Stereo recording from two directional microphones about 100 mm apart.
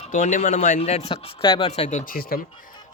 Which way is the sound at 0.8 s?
90° left.